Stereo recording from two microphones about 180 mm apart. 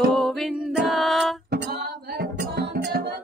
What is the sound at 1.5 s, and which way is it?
Music, 65° right (ahead or behind).